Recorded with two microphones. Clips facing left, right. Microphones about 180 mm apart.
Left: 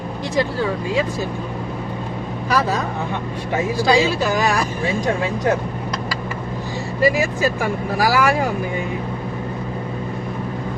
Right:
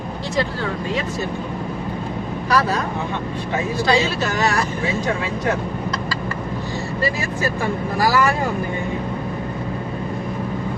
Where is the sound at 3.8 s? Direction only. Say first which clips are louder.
Left 3 dB; 10° left (ahead or behind).